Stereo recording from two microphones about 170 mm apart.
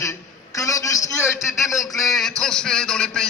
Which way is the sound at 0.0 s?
20° left (ahead or behind).